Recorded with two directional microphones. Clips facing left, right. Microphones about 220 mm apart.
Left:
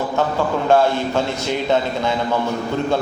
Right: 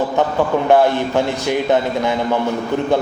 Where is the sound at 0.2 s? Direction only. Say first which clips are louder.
Right 2 dB; 20° right (ahead or behind).